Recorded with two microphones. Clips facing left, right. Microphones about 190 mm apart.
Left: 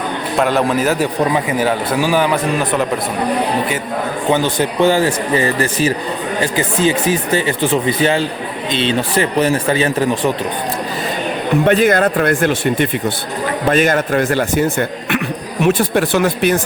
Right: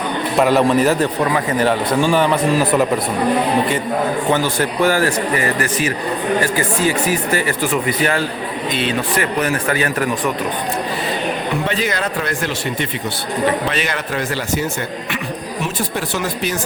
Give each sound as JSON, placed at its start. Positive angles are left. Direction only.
{"t": 0.3, "sound": "a man's voice", "side_deg": 0}
{"t": 1.2, "sound": "speech", "side_deg": 20}
{"t": 1.5, "sound": "a man's voice", "side_deg": 5}
{"t": 4.3, "sound": "speech", "side_deg": 20}
{"t": 11.6, "sound": "speech", "side_deg": 55}